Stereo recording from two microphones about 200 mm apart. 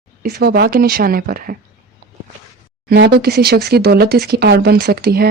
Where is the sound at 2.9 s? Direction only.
50° right (ahead or behind).